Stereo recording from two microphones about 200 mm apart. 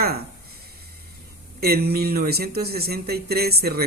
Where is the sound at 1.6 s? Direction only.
50° right (ahead or behind).